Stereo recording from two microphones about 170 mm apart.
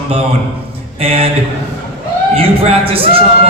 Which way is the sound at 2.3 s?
35° right (ahead or behind).